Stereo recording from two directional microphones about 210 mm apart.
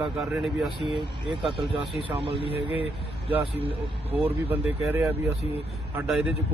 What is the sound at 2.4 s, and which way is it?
Speech, 25° left (ahead or behind).